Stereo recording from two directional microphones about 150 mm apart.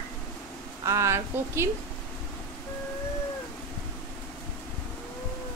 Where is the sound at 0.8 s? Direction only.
20° right (ahead or behind).